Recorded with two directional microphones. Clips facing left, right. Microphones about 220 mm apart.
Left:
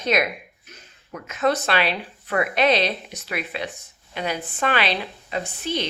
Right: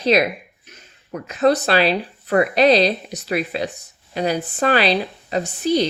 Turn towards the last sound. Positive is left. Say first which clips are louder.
# right 8 dB
turn(degrees=-35)  # may be behind; listen again after turning